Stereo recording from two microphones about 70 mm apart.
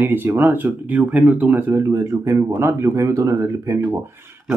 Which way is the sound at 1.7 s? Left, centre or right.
Right.